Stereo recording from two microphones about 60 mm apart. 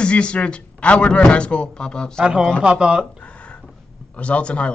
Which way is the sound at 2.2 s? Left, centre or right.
Centre.